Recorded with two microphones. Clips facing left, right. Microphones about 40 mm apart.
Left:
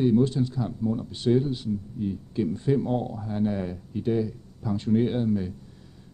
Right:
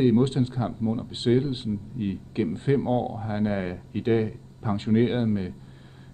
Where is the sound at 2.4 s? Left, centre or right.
Right.